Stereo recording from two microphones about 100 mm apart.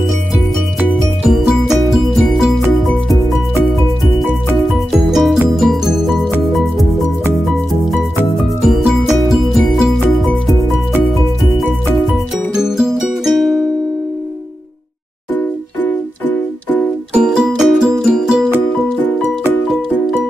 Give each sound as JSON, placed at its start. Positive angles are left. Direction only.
{"t": 1.3, "sound": "music", "side_deg": 0}
{"t": 4.6, "sound": "music", "side_deg": 0}
{"t": 8.6, "sound": "music", "side_deg": 0}
{"t": 12.5, "sound": "music", "side_deg": -5}
{"t": 15.3, "sound": "music", "side_deg": 15}
{"t": 17.1, "sound": "music", "side_deg": -10}